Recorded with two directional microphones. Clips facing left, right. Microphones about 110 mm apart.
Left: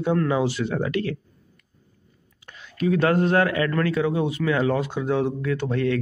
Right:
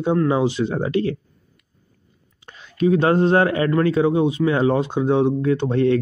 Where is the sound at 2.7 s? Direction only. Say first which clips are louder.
Right 4 dB; 25° right (ahead or behind).